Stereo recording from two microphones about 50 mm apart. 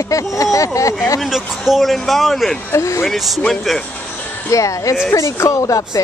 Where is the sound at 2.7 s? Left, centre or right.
Left.